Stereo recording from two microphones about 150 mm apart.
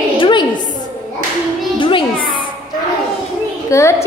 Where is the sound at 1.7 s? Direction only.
35° left (ahead or behind).